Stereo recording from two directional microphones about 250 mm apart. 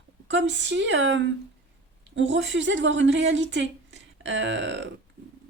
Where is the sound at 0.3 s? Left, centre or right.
Right.